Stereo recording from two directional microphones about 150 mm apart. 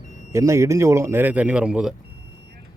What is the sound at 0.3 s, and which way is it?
Speech, 20° right (ahead or behind).